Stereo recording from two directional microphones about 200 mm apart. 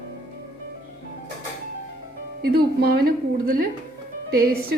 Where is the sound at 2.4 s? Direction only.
50° right (ahead or behind).